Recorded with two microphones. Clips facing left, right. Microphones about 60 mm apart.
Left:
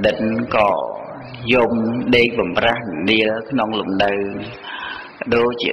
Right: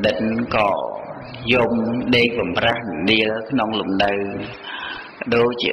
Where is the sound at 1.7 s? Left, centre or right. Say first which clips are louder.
Left 1 dB; left.